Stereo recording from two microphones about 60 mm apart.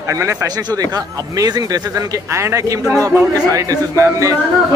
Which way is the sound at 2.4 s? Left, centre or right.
Right.